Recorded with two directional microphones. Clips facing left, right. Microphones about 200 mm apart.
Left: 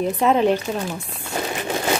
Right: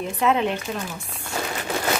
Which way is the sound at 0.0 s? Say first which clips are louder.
Left 4 dB; 40° left (ahead or behind).